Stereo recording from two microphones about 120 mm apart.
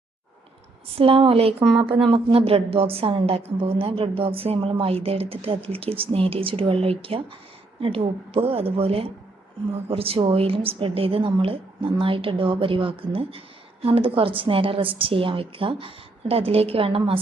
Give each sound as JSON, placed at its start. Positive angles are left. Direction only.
{"t": 0.9, "sound": "speech", "side_deg": -50}